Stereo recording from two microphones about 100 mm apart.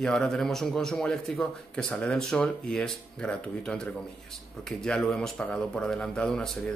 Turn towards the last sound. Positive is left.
turn(degrees=5)  # may be behind; listen again after turning